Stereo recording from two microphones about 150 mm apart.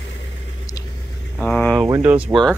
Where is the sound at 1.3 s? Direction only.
5° left (ahead or behind).